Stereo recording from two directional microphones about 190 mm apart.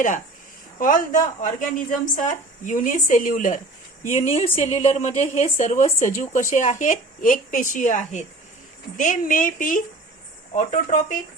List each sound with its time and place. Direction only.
0.8 s a woman's voice: 45° left (ahead or behind)